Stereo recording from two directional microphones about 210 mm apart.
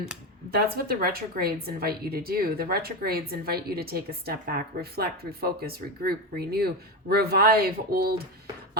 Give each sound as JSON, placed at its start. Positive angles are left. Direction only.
{"t": 0.5, "sound": "a woman's voice", "side_deg": -45}